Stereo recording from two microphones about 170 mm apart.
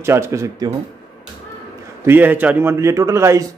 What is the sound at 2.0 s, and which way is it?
A man's voice, 10° right (ahead or behind).